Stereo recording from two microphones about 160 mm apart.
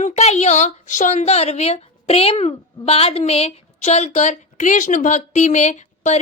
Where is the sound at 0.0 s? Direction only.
40° left (ahead or behind).